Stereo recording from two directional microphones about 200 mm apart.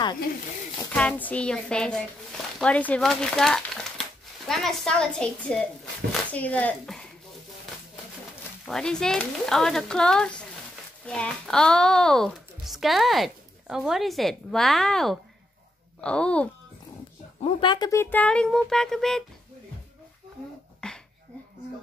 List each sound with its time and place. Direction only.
1.2 s speech: 5° left (ahead or behind)
8.6 s speech: 5° left (ahead or behind)
17.4 s speech: 25° left (ahead or behind)
18.1 s speech: 5° left (ahead or behind)
20.8 s a sound: 5° left (ahead or behind)